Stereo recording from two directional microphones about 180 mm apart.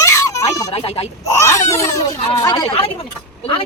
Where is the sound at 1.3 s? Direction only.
15° left (ahead or behind).